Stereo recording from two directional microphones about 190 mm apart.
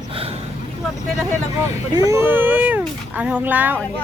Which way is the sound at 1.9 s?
15° right (ahead or behind).